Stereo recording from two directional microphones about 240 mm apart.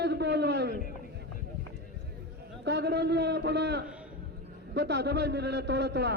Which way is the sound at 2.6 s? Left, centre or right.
Right.